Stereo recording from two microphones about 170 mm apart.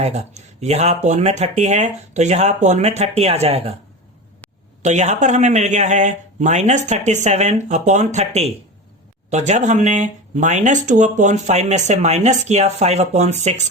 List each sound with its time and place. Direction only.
0.0 s speech: 40° right (ahead or behind)
4.8 s speech: 45° right (ahead or behind)